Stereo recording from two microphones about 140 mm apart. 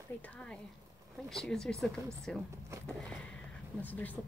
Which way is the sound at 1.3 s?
Centre (ahead or behind).